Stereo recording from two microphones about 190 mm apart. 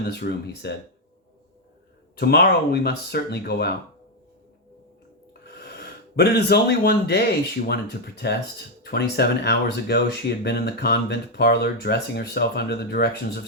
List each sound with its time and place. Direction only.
0.1 s speech: 60° left (ahead or behind)
2.1 s speech: 55° left (ahead or behind)
5.5 s a sound: 60° left (ahead or behind)
7.7 s speech: 55° left (ahead or behind)